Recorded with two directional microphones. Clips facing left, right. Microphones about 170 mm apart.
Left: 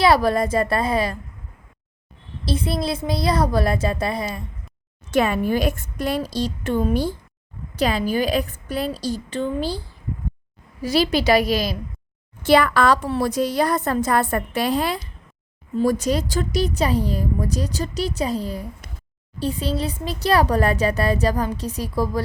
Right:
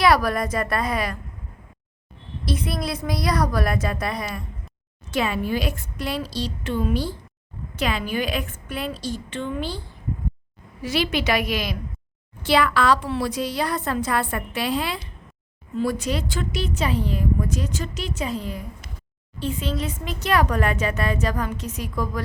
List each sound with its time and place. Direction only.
0.0 s a woman's voice: 25° left (ahead or behind)
2.4 s a woman's voice: 30° left (ahead or behind)
5.1 s a woman's voice: 50° left (ahead or behind)
7.8 s speech: 35° left (ahead or behind)
10.8 s speech: 35° left (ahead or behind)
12.4 s a woman's voice: 45° left (ahead or behind)